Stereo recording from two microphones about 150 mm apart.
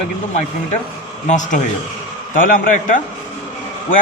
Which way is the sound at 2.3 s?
65° left (ahead or behind).